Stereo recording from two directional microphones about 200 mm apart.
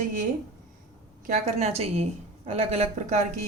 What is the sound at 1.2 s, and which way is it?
A woman's voice, 35° right (ahead or behind).